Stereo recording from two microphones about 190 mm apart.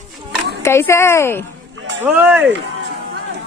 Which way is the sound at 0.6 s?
15° left (ahead or behind).